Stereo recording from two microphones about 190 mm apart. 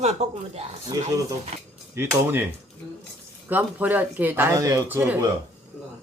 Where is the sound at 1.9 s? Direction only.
10° right (ahead or behind).